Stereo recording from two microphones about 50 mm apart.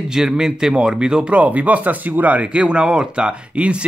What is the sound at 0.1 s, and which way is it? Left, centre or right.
Speech, centre.